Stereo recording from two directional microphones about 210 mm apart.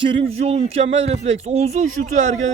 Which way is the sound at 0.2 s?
30° right (ahead or behind).